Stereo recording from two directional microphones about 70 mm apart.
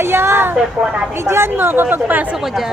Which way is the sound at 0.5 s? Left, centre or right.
Centre.